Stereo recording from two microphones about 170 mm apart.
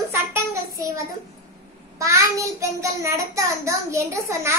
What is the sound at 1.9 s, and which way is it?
A child's voice, 15° right (ahead or behind).